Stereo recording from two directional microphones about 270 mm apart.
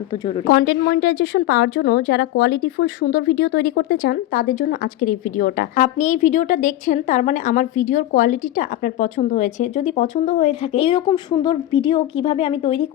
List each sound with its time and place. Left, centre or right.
0.4 s a woman's voice: left